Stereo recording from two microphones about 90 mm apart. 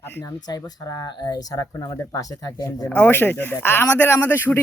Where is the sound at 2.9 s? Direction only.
20° left (ahead or behind).